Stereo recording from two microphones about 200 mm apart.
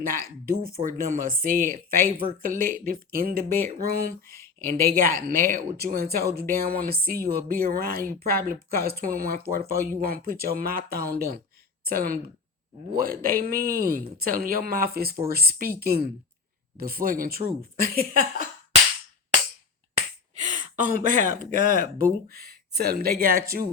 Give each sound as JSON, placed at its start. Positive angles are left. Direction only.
{"t": 0.0, "sound": "speech", "side_deg": -45}
{"t": 20.0, "sound": "speech", "side_deg": -40}